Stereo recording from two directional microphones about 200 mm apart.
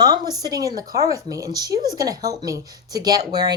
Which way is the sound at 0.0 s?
20° right (ahead or behind).